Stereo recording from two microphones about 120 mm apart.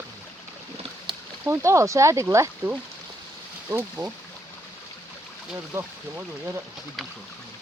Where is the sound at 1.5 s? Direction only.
25° right (ahead or behind).